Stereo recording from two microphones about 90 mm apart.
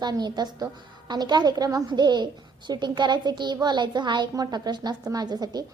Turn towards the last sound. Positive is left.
turn(degrees=-50)  # may be behind; listen again after turning